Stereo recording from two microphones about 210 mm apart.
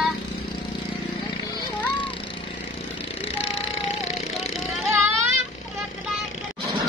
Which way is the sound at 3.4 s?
30° left (ahead or behind).